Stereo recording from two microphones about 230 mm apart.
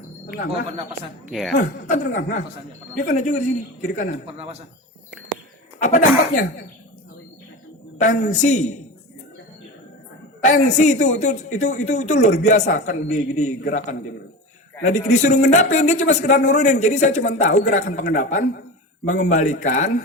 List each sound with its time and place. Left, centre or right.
1.3 s a woman's voice: centre
2.0 s speech: left
5.8 s speech: left
7.9 s a man's voice: left
10.4 s speech: left
14.8 s speech: left